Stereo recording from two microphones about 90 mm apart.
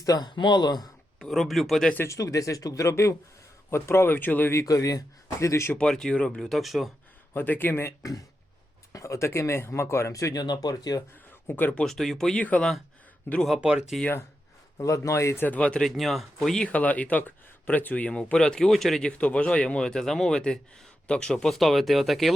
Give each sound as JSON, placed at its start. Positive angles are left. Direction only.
{"t": 0.0, "sound": "speech", "side_deg": 45}
{"t": 1.2, "sound": "speech", "side_deg": 0}
{"t": 2.0, "sound": "speech", "side_deg": 35}
{"t": 4.5, "sound": "speech", "side_deg": 40}
{"t": 5.7, "sound": "speech", "side_deg": 5}
{"t": 7.3, "sound": "speech", "side_deg": 20}
{"t": 10.4, "sound": "speech", "side_deg": 50}
{"t": 11.4, "sound": "speech", "side_deg": 20}
{"t": 11.8, "sound": "speech", "side_deg": 5}
{"t": 12.4, "sound": "speech", "side_deg": 15}
{"t": 13.6, "sound": "speech", "side_deg": -10}
{"t": 14.8, "sound": "speech", "side_deg": 35}
{"t": 15.4, "sound": "speech", "side_deg": 15}
{"t": 16.0, "sound": "speech", "side_deg": 0}